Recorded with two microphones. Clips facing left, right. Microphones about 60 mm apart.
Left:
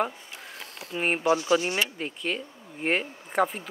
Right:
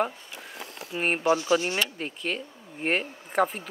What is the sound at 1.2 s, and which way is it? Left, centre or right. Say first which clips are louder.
Speech: even; left.